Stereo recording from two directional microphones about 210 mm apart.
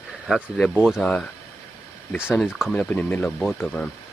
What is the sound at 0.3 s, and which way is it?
Speech, centre (ahead or behind).